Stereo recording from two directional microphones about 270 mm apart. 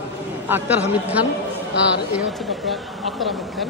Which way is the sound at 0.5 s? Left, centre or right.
Centre.